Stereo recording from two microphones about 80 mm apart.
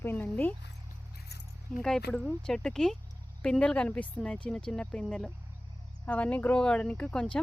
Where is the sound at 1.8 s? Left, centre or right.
Centre.